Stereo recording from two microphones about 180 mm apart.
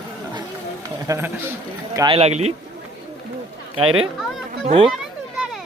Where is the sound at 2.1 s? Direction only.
35° right (ahead or behind).